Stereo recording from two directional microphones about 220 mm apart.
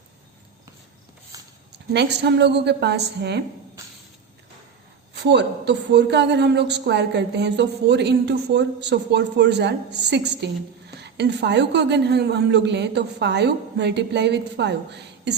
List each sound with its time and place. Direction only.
1.7 s a man's voice: 50° right (ahead or behind)
5.1 s a man's voice: 50° right (ahead or behind)